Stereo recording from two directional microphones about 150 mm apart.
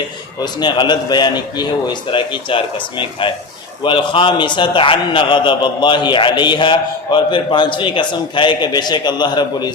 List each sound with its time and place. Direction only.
0.4 s a man's voice: 30° left (ahead or behind)